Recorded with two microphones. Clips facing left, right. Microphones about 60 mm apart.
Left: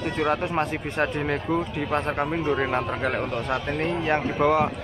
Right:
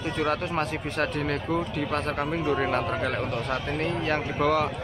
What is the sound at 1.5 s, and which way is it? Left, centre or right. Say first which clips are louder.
Speech: left 2 dB; centre.